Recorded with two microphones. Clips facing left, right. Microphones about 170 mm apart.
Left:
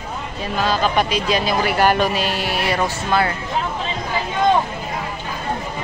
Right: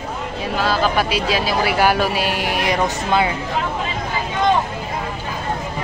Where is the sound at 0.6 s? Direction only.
5° right (ahead or behind).